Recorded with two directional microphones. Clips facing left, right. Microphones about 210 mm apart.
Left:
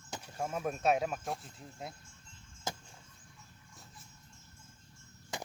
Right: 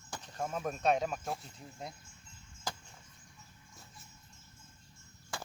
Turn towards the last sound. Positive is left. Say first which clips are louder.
# left 2 dB
turn(degrees=20)  # may be behind; listen again after turning